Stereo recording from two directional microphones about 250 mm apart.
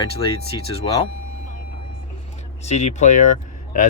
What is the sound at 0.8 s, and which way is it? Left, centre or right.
Speech, centre.